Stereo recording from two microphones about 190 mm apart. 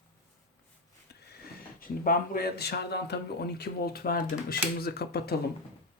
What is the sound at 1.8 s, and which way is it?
A man's voice, 50° left (ahead or behind).